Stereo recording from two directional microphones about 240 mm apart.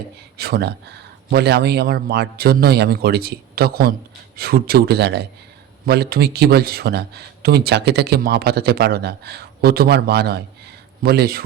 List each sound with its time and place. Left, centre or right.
0.3 s a man's voice: right